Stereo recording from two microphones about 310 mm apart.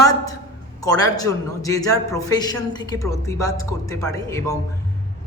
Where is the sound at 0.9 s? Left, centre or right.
Centre.